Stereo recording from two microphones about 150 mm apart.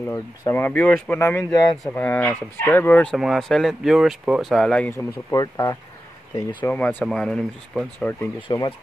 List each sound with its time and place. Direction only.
0.1 s speech: 15° left (ahead or behind)
3.2 s speech: centre (ahead or behind)
4.9 s speech: 25° left (ahead or behind)
6.6 s speech: 10° left (ahead or behind)
8.4 s speech: 30° left (ahead or behind)